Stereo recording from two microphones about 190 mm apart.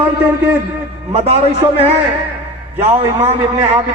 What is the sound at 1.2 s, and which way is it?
A man's voice, 35° right (ahead or behind).